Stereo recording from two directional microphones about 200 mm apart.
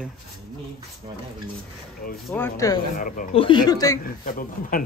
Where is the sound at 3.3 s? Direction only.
25° left (ahead or behind).